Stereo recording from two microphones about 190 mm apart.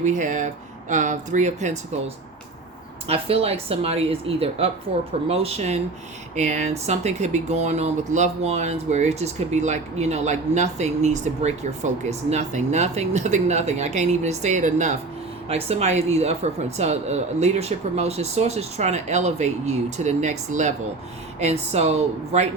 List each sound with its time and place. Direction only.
0.0 s speech: 40° right (ahead or behind)
3.1 s speech: 30° right (ahead or behind)